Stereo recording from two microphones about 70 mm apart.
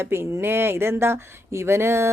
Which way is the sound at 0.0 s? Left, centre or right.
Right.